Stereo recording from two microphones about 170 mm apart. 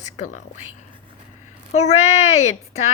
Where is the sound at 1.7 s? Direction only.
40° left (ahead or behind).